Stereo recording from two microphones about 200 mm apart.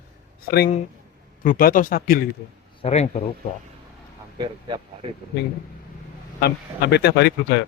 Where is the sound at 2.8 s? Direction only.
35° left (ahead or behind).